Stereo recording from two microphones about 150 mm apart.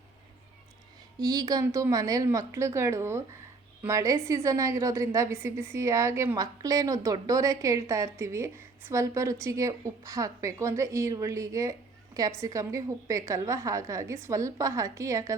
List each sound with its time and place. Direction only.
1.2 s a woman's voice: 25° right (ahead or behind)